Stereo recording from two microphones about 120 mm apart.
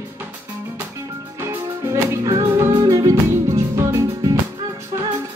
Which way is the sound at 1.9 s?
25° right (ahead or behind).